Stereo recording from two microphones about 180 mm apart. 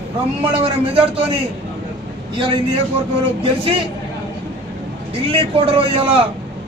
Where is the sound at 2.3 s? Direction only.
30° right (ahead or behind).